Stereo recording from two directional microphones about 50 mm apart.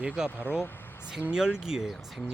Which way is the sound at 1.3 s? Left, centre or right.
Centre.